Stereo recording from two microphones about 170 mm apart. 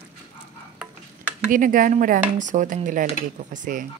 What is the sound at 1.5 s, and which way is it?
Speech, 55° right (ahead or behind).